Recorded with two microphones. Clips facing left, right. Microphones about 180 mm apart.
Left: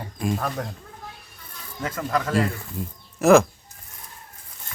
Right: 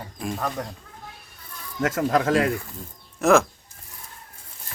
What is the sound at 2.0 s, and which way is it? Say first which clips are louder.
Speech: right 2 dB; 60° right (ahead or behind).